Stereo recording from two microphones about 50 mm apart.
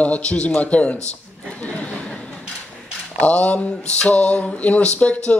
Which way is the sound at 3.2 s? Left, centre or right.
Left.